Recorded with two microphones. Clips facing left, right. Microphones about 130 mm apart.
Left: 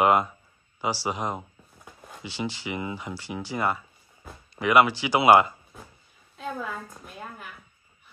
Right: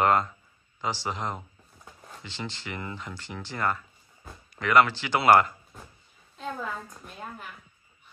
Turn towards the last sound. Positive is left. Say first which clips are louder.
# even
turn(degrees=5)  # may be behind; listen again after turning